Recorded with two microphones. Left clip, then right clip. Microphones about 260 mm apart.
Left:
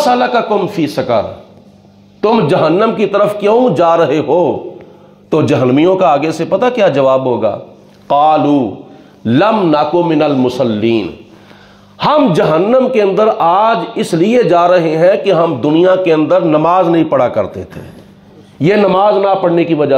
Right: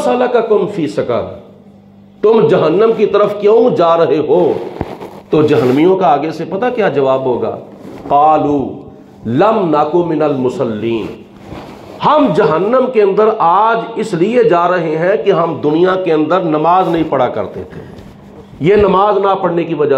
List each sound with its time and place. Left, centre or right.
0.0 s a man's voice: left
2.2 s a man's voice: left
18.6 s a man's voice: left